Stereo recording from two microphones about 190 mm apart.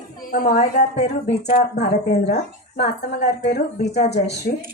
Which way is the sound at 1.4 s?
60° left (ahead or behind).